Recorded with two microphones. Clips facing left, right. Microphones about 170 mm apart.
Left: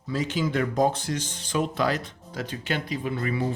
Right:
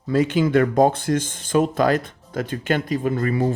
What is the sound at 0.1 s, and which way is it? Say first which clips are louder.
Speech: right 9 dB; 55° right (ahead or behind).